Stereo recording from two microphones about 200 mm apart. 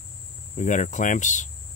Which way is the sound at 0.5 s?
40° left (ahead or behind).